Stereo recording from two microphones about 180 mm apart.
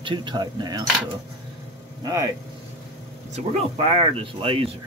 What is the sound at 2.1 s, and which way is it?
Speech, 20° right (ahead or behind).